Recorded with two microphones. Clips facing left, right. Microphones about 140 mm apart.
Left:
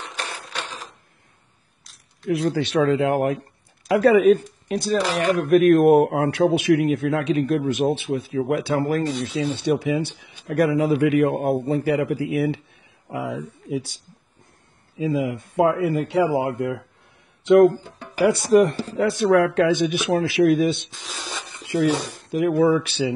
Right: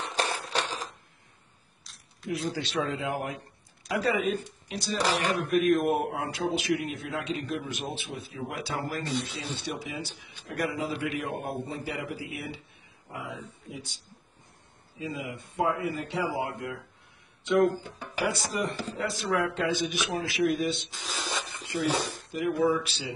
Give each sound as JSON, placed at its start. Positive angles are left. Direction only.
{"t": 0.0, "sound": "crushing", "side_deg": -35}
{"t": 2.5, "sound": "a man's voice", "side_deg": 65}
{"t": 5.4, "sound": "a man's voice", "side_deg": 65}
{"t": 9.4, "sound": "speech", "side_deg": 75}
{"t": 9.7, "sound": "a man's voice", "side_deg": 65}
{"t": 15.0, "sound": "a man's voice", "side_deg": 80}
{"t": 18.2, "sound": "a man's voice", "side_deg": 65}
{"t": 20.9, "sound": "speech", "side_deg": 0}
{"t": 22.0, "sound": "a man's voice", "side_deg": 60}